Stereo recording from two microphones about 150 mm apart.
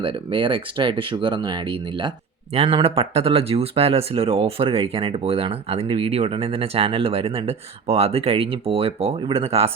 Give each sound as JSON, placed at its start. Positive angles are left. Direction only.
{"t": 0.0, "sound": "speech", "side_deg": -35}